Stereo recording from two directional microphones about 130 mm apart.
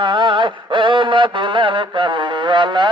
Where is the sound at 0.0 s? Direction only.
40° right (ahead or behind).